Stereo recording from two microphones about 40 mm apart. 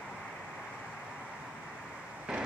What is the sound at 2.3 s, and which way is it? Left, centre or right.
Vehicle, centre.